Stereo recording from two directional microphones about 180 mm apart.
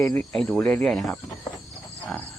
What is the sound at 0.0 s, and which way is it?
Speech, 15° left (ahead or behind).